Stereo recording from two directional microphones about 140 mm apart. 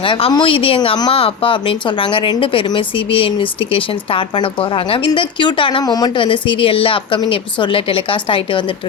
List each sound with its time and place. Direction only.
0.0 s speech: 40° left (ahead or behind)